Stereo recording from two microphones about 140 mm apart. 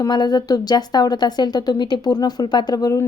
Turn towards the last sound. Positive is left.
turn(degrees=25)  # may be behind; listen again after turning